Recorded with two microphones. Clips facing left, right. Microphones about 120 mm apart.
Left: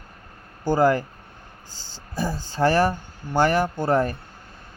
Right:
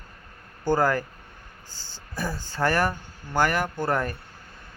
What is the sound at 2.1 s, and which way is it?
Speech, 25° left (ahead or behind).